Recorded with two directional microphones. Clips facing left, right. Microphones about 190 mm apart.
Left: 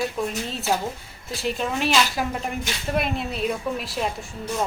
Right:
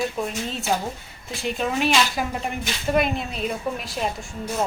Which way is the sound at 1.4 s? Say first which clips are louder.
Right 1 dB; centre (ahead or behind).